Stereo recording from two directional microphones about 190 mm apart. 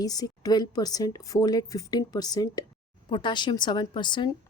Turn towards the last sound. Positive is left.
turn(degrees=25)  # may be behind; listen again after turning